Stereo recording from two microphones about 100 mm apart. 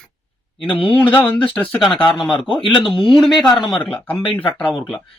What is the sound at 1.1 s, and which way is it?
Speech, 15° left (ahead or behind).